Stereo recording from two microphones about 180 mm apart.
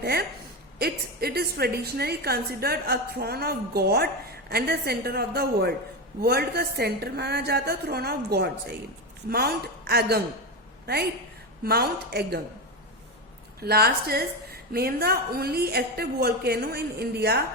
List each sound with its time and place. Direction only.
0.0 s a sound: 60° right (ahead or behind)
0.8 s a woman's voice: 60° right (ahead or behind)
11.6 s a woman's voice: 60° right (ahead or behind)
13.6 s a woman's voice: 60° right (ahead or behind)